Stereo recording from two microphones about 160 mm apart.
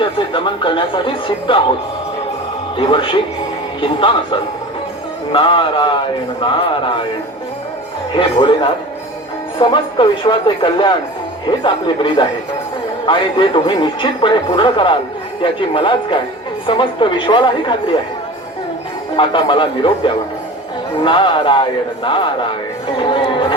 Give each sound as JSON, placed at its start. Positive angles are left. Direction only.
{"t": 0.0, "sound": "speech", "side_deg": 30}
{"t": 2.7, "sound": "speech", "side_deg": 30}
{"t": 8.1, "sound": "speech", "side_deg": 30}
{"t": 19.1, "sound": "speech", "side_deg": 30}